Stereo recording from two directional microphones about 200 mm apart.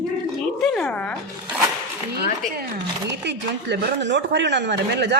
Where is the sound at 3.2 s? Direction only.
60° right (ahead or behind).